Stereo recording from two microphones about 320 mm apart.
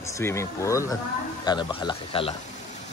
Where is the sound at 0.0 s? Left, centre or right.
Centre.